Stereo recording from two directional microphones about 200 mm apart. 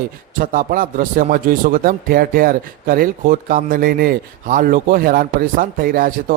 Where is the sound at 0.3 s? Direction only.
45° right (ahead or behind).